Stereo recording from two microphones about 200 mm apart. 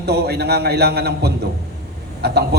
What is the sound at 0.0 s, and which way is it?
A man's voice, 55° right (ahead or behind).